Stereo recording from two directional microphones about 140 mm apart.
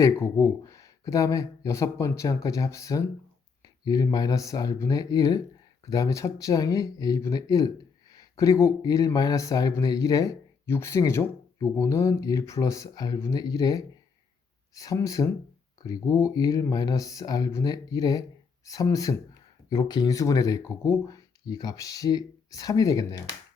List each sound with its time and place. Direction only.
0.0 s speech: 20° left (ahead or behind)